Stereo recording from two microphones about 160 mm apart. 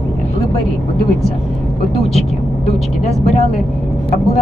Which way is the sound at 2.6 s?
40° left (ahead or behind).